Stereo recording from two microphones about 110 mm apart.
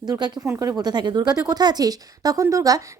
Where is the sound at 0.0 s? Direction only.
40° right (ahead or behind).